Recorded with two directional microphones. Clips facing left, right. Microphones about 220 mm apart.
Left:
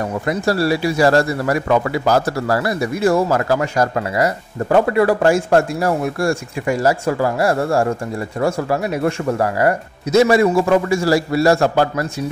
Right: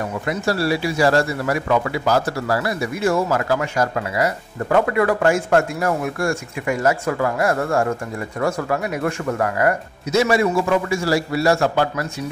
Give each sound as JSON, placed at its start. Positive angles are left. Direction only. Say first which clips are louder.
{"t": 0.3, "sound": "speech", "louder": "left 3 dB", "side_deg": 40}